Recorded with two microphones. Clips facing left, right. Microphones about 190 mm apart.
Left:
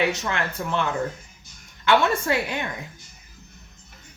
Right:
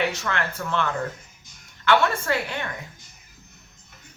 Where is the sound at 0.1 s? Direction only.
15° left (ahead or behind).